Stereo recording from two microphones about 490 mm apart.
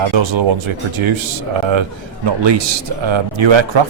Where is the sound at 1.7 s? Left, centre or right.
Right.